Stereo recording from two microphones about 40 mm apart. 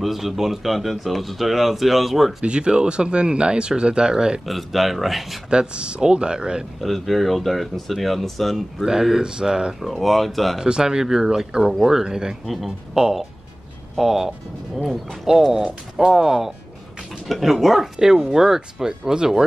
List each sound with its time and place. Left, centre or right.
0.0 s speech: centre
2.4 s speech: right
4.5 s speech: centre
5.5 s speech: right
6.8 s speech: centre
8.7 s speech: centre
9.8 s speech: centre
10.6 s speech: centre
12.4 s speech: centre
12.9 s speech: centre